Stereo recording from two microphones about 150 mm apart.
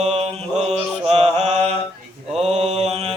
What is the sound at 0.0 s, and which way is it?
Mantra, 45° right (ahead or behind).